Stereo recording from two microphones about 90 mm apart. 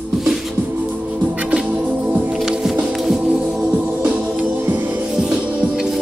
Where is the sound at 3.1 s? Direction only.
10° right (ahead or behind).